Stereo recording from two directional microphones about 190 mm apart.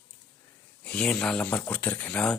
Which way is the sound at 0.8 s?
5° left (ahead or behind).